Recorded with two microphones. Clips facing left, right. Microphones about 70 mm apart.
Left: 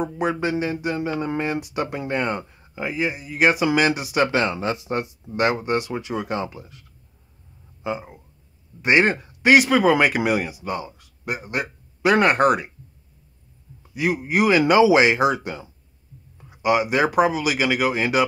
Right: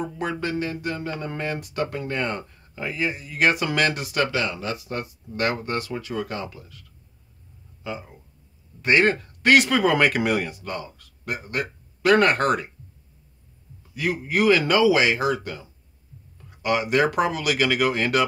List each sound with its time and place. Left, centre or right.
0.0 s speech: centre
4.3 s speech: left
13.9 s speech: centre